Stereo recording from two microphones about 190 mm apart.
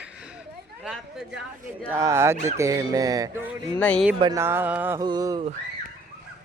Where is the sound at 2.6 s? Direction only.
15° right (ahead or behind).